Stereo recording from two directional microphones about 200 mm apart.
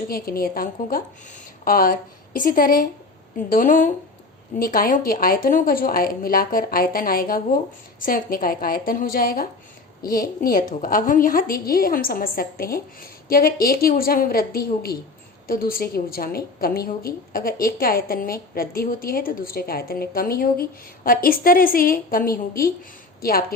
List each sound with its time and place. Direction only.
0.1 s a woman's voice: 50° left (ahead or behind)